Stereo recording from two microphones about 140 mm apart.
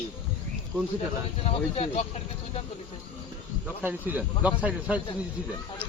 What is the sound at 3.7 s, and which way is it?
Speech, 10° right (ahead or behind).